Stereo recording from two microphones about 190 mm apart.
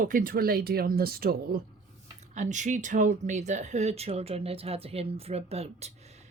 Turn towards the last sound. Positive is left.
turn(degrees=-35)  # may be behind; listen again after turning